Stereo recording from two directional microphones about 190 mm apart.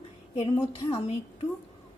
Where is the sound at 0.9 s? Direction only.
30° left (ahead or behind).